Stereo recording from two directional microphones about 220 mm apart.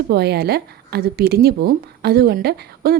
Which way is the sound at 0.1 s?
45° right (ahead or behind).